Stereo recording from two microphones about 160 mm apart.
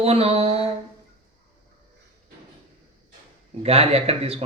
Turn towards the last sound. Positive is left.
turn(degrees=-40)  # may be behind; listen again after turning